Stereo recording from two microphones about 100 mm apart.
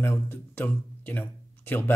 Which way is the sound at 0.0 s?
25° left (ahead or behind).